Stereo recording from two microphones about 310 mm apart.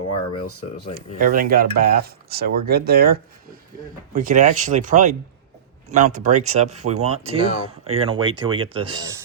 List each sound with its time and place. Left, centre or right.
0.9 s speech: right